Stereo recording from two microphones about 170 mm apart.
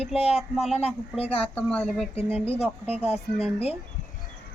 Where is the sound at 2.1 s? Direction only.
35° left (ahead or behind).